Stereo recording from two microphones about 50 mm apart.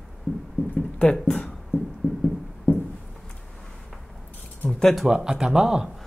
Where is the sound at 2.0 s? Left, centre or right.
Left.